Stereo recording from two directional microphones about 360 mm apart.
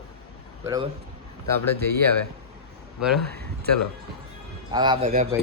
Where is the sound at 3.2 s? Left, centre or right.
Right.